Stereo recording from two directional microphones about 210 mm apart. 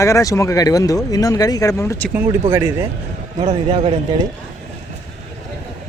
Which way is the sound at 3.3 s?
25° right (ahead or behind).